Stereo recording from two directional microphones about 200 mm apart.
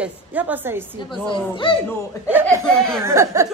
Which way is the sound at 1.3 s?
25° left (ahead or behind).